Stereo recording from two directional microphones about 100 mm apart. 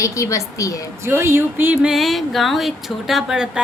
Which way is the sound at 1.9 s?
Centre (ahead or behind).